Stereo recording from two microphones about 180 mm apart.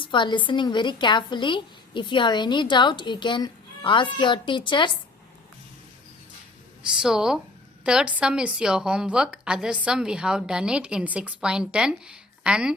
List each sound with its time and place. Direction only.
0.0 s a woman's voice: 25° left (ahead or behind)
6.9 s a woman's voice: 5° right (ahead or behind)